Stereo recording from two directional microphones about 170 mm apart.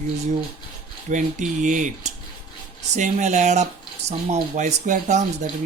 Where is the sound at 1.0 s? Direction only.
45° right (ahead or behind).